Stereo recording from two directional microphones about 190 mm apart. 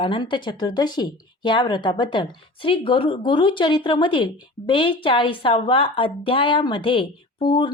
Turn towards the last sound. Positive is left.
turn(degrees=25)  # may be behind; listen again after turning